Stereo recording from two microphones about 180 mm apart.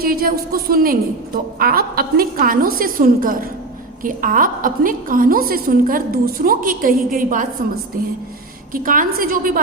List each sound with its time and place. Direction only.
0.0 s a woman's voice: 55° right (ahead or behind)
8.7 s a woman's voice: 50° right (ahead or behind)